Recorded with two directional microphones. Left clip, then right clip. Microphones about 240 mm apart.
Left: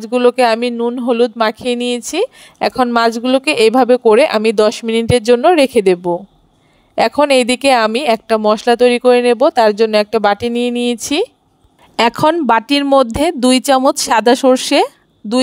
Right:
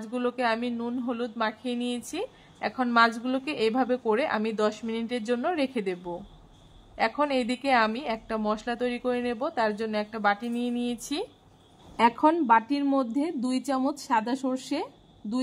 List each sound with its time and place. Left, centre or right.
0.0 s speech: left